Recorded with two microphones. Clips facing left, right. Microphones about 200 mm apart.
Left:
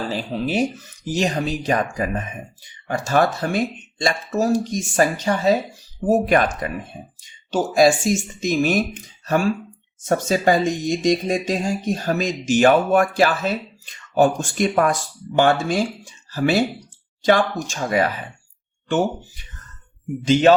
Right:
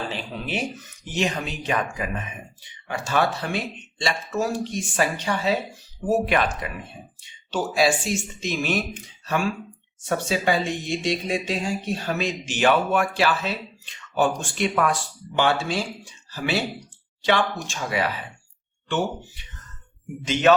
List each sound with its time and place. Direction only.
0.1 s speech: 40° left (ahead or behind)
20.2 s speech: 30° left (ahead or behind)